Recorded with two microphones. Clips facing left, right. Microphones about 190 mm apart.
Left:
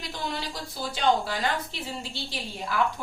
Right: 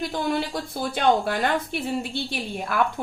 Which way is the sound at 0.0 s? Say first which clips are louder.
Right 8 dB; 55° right (ahead or behind).